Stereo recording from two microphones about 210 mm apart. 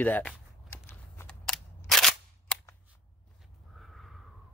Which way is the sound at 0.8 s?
10° left (ahead or behind).